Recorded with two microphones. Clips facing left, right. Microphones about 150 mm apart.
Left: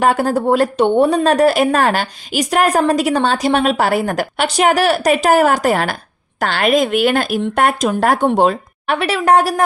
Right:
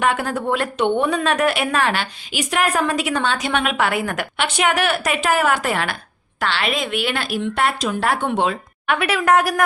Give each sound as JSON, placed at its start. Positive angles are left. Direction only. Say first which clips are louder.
{"t": 0.0, "sound": "a woman's voice", "louder": "left 6 dB", "side_deg": 40}